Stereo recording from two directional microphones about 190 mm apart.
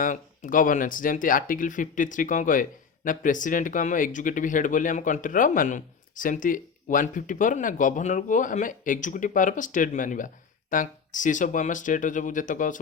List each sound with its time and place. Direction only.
0.0 s speech: 45° left (ahead or behind)